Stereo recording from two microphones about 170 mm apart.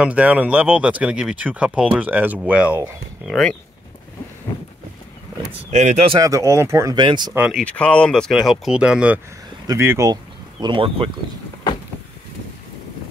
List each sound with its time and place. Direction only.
0.0 s speech: 10° right (ahead or behind)
5.7 s speech: 45° right (ahead or behind)
6.1 s speech: 20° right (ahead or behind)
7.3 s speech: 5° right (ahead or behind)
7.6 s speech: 5° left (ahead or behind); by 10.1 s 15° right (ahead or behind)
10.6 s speech: 30° right (ahead or behind)